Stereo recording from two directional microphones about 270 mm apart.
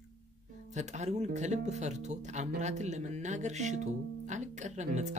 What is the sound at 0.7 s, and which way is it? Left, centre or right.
Speech, right.